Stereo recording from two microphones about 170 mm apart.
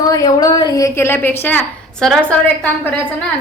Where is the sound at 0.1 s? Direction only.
20° left (ahead or behind); by 2.2 s 5° left (ahead or behind).